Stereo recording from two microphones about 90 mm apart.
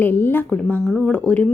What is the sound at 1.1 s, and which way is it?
Speech, 15° left (ahead or behind).